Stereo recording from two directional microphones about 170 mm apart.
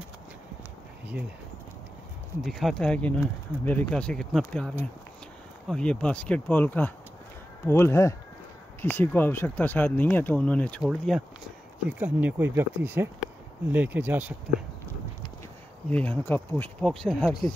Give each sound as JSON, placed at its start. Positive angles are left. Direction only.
{"t": 2.4, "sound": "speech", "side_deg": 0}
{"t": 15.9, "sound": "speech", "side_deg": 10}